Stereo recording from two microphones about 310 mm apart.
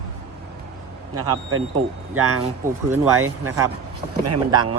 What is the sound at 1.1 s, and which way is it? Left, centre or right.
Speech, right.